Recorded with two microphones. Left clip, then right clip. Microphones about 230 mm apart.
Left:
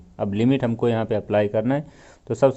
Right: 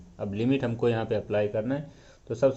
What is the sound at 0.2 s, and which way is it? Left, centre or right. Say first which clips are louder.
A man's voice: left 6 dB; left.